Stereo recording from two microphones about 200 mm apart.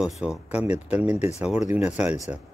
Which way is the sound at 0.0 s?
5° right (ahead or behind).